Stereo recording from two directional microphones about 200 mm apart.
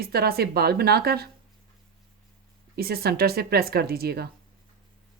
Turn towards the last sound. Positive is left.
turn(degrees=-50)  # may be behind; listen again after turning